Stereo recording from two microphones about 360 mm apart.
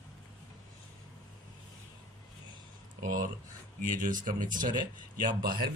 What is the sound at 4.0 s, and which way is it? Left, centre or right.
Speech, right.